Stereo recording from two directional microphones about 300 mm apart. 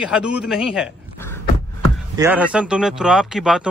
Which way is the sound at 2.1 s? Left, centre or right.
Centre.